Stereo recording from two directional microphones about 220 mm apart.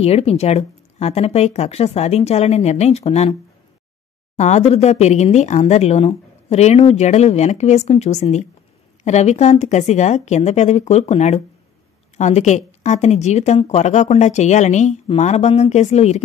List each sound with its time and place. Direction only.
0.0 s speech: 30° left (ahead or behind)
4.4 s speech: 30° left (ahead or behind)